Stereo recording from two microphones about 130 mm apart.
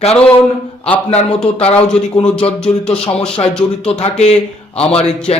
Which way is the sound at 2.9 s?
45° left (ahead or behind).